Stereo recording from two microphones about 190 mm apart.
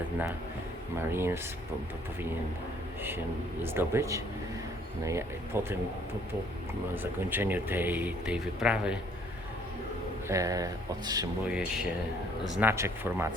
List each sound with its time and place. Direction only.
0.9 s speech: 10° right (ahead or behind)
3.6 s speech: 10° right (ahead or behind)
5.5 s speech: 10° right (ahead or behind)
6.9 s speech: 10° right (ahead or behind)
10.2 s speech: 15° right (ahead or behind)
11.4 s speech: 5° right (ahead or behind)